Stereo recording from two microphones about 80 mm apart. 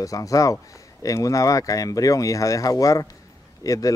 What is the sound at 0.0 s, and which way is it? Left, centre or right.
Speech, left.